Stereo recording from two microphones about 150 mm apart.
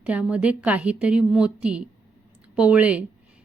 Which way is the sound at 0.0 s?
10° right (ahead or behind).